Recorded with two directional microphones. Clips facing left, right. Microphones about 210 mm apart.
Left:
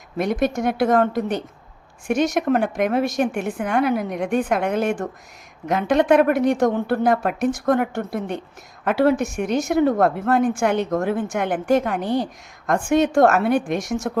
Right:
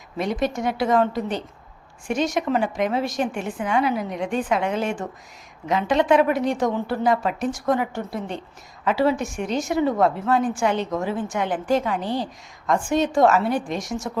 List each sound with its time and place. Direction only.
0.2 s a woman's voice: 55° left (ahead or behind)
2.0 s a woman's voice: 60° left (ahead or behind)